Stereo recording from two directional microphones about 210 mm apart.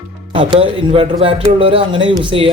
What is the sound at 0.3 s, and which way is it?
Speech, 25° right (ahead or behind).